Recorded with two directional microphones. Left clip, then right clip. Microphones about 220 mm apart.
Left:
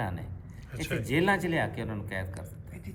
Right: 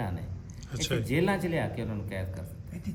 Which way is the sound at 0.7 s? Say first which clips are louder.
Right 3 dB; 10° right (ahead or behind).